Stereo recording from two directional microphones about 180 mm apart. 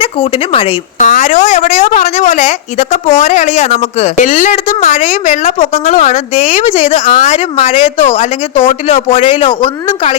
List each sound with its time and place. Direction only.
0.0 s speech: 30° left (ahead or behind)
0.9 s a woman's voice: 45° left (ahead or behind)